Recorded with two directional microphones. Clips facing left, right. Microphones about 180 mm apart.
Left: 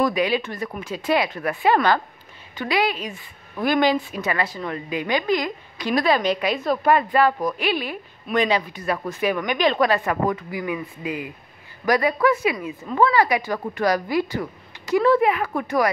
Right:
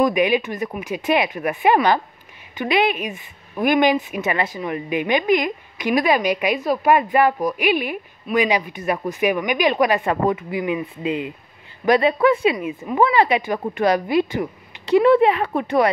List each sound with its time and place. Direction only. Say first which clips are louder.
0.0 s a woman's voice: right 3 dB; 20° right (ahead or behind)
10.0 s a woman's voice: right 3 dB; 25° right (ahead or behind)